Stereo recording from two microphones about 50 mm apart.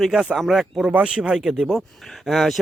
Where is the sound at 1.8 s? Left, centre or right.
Centre.